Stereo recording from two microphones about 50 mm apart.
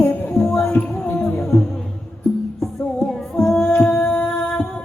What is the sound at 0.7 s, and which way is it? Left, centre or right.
Music, left.